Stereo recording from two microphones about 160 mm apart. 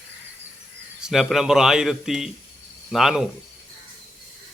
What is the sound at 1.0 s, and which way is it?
Speech, centre (ahead or behind).